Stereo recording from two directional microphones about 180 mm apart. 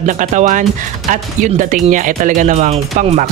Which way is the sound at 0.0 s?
45° right (ahead or behind).